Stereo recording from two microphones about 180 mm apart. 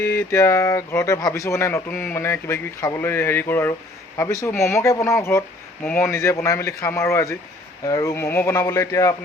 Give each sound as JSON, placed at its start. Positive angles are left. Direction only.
{"t": 0.0, "sound": "speech", "side_deg": 15}